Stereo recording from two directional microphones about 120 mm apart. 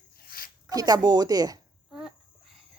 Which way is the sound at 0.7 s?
30° right (ahead or behind).